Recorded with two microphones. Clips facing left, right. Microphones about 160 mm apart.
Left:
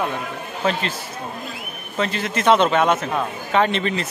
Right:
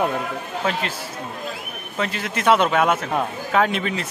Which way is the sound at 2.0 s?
5° right (ahead or behind).